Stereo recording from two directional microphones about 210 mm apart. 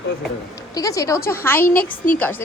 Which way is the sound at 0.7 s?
15° left (ahead or behind).